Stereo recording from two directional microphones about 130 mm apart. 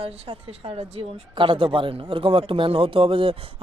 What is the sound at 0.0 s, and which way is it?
Speech, 45° right (ahead or behind).